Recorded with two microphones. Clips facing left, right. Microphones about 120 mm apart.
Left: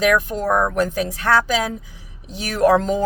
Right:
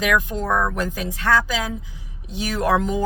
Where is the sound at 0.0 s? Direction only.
40° left (ahead or behind).